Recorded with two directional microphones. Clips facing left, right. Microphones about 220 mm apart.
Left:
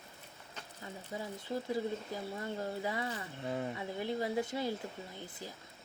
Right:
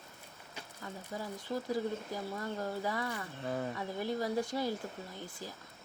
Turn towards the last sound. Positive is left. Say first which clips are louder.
# right 1 dB
turn(degrees=20)  # may be behind; listen again after turning